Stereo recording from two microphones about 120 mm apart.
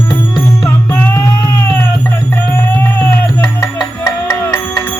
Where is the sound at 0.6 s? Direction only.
20° left (ahead or behind).